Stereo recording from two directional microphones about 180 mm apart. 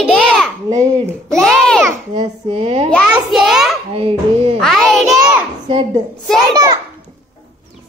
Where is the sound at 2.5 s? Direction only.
30° right (ahead or behind).